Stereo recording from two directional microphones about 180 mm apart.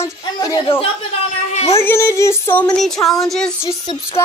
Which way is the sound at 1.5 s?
35° left (ahead or behind).